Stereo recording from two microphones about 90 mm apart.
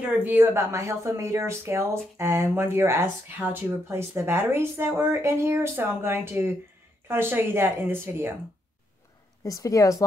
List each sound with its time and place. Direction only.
0.2 s speech: 20° right (ahead or behind)
9.4 s a woman's voice: 40° left (ahead or behind)